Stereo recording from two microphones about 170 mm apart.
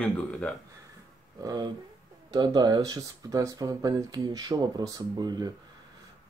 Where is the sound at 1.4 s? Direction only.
25° right (ahead or behind).